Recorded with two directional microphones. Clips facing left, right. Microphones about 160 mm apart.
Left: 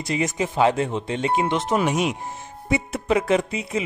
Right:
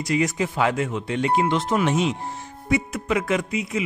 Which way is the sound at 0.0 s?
25° left (ahead or behind).